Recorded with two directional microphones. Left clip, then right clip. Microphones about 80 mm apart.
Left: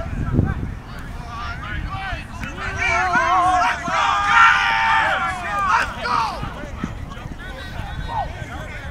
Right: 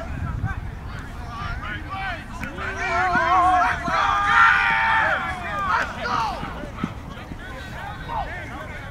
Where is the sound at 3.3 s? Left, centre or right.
Centre.